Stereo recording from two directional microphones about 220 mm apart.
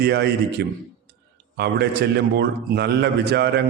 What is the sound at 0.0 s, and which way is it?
Speech, 50° right (ahead or behind).